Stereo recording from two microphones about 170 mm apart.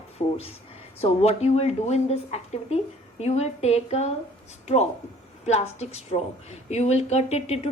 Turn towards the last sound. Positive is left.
turn(degrees=40)  # may be behind; listen again after turning